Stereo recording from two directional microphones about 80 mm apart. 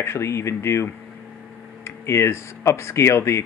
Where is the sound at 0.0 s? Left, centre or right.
Left.